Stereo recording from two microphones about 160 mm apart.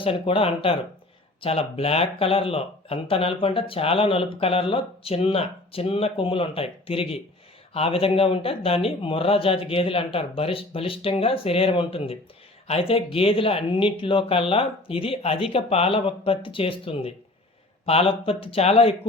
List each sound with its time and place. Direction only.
0.0 s speech: 35° left (ahead or behind)